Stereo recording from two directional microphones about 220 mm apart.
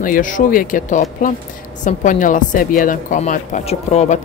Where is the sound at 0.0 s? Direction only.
35° left (ahead or behind).